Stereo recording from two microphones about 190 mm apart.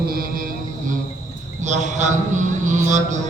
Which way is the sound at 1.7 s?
40° right (ahead or behind).